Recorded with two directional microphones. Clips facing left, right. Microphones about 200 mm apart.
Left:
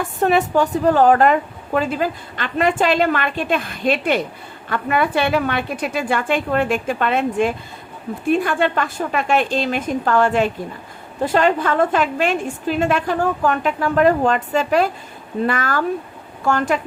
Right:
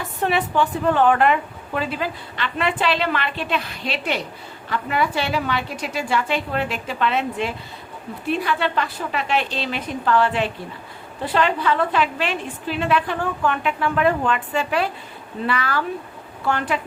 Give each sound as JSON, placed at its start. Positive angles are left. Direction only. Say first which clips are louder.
{"t": 0.0, "sound": "a woman's voice", "louder": "left 5 dB", "side_deg": 45}